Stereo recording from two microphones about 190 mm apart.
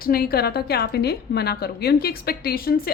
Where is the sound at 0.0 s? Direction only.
50° left (ahead or behind).